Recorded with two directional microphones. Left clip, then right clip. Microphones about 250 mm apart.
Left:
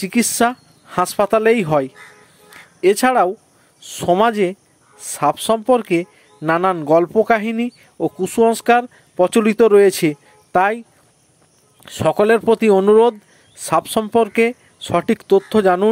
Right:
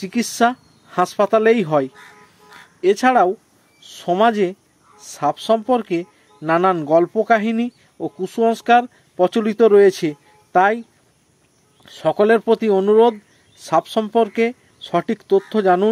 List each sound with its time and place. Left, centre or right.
0.0 s speech: centre